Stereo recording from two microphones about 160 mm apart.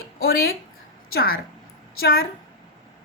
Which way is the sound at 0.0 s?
75° left (ahead or behind).